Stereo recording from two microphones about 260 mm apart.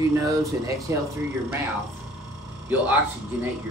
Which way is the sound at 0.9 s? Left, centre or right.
Centre.